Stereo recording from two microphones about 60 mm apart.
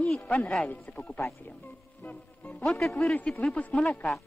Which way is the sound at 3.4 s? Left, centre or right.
Left.